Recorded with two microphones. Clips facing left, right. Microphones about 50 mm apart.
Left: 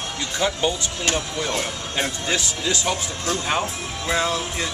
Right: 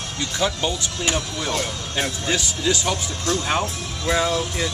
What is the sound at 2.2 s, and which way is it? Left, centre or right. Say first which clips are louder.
Speech: right 2 dB; centre.